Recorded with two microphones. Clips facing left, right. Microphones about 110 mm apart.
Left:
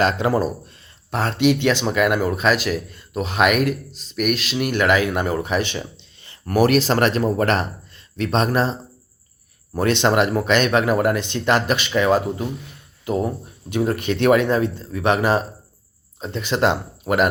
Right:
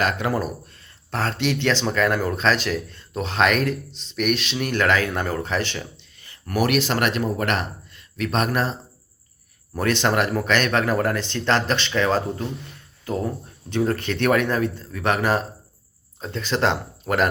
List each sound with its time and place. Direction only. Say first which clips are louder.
0.0 s speech: left 4 dB; 25° left (ahead or behind)